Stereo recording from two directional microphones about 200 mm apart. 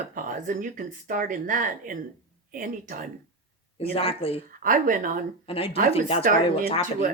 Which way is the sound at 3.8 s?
30° left (ahead or behind).